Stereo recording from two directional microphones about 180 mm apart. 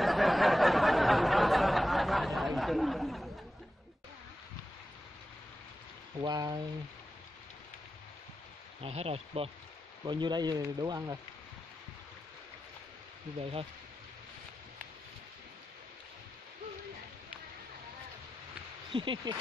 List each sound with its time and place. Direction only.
0.0 s a sound: centre (ahead or behind)
6.2 s speech: 20° right (ahead or behind)
8.8 s speech: 35° right (ahead or behind)
13.4 s speech: 30° right (ahead or behind)
18.9 s speech: 25° right (ahead or behind)